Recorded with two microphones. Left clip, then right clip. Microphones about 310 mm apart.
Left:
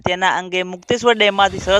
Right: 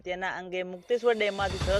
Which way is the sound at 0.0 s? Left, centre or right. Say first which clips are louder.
Left 16 dB; left.